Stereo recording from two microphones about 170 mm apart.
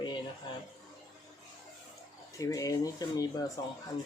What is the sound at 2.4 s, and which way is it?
Speech, 20° left (ahead or behind).